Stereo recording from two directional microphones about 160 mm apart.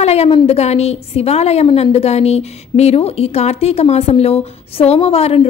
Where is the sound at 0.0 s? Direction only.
40° left (ahead or behind).